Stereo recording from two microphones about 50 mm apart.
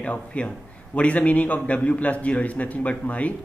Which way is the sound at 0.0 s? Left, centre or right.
Left.